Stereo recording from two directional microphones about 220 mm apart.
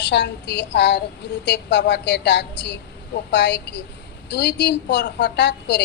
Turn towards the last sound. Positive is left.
turn(degrees=50)  # may be behind; listen again after turning